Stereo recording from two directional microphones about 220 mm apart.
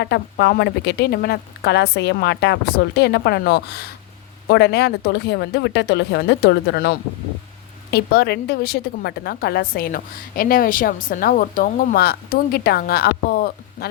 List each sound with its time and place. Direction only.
0.0 s a woman's voice: 50° left (ahead or behind)